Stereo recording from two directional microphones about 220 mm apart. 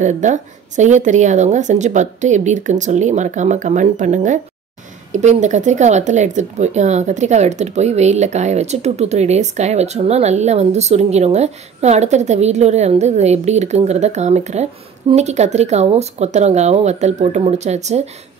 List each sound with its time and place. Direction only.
0.0 s speech: 35° right (ahead or behind)